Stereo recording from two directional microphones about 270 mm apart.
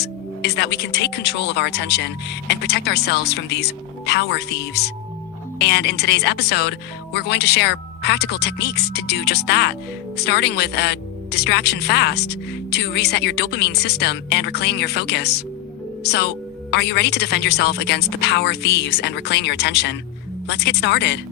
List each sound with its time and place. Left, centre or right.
0.5 s speech: left